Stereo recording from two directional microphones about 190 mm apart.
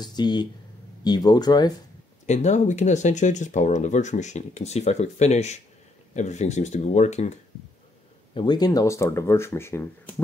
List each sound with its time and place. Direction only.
0.0 s speech: 20° left (ahead or behind)
2.2 s speech: 40° left (ahead or behind)
8.4 s speech: 20° left (ahead or behind)